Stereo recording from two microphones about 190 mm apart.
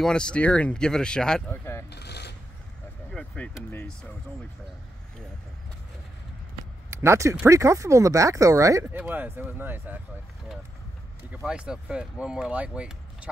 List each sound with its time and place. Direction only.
0.0 s speech: 5° left (ahead or behind)
1.9 s a sound: 60° left (ahead or behind)
3.2 s speech: 5° left (ahead or behind)
6.9 s speech: 15° right (ahead or behind)
11.4 s speech: 5° right (ahead or behind)